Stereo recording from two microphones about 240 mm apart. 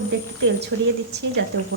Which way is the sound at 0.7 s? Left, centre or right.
Right.